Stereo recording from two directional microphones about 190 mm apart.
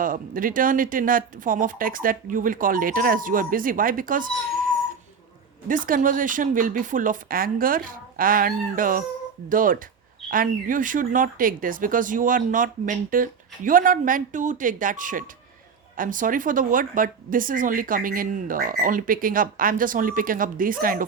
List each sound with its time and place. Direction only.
0.0 s speech: 45° right (ahead or behind)
5.6 s speech: 45° right (ahead or behind)